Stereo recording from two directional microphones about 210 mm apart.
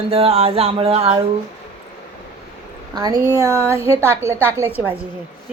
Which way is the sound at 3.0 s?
20° right (ahead or behind).